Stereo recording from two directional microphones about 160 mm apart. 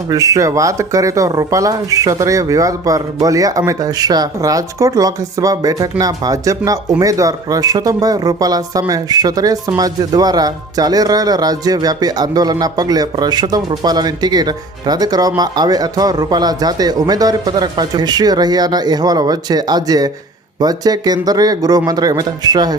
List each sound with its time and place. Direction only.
0.1 s speech: 20° right (ahead or behind)